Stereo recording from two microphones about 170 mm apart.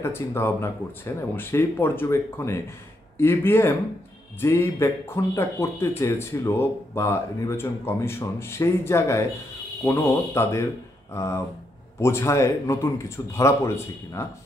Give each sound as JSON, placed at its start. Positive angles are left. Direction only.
{"t": 0.0, "sound": "speech", "side_deg": 15}